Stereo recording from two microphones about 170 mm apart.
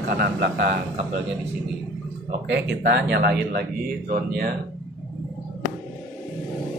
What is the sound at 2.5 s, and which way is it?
A man's voice, 90° right.